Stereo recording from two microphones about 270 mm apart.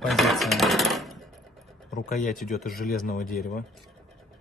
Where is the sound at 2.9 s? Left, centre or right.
Left.